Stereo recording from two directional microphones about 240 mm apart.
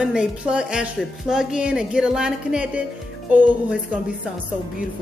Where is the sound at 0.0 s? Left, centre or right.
Centre.